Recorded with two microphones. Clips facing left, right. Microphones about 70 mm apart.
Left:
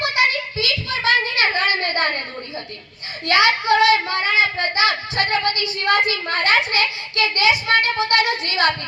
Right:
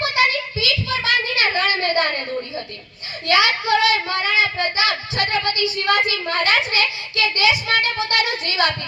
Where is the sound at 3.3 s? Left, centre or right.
Left.